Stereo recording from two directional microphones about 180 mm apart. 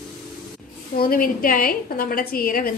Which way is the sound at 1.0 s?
55° left (ahead or behind).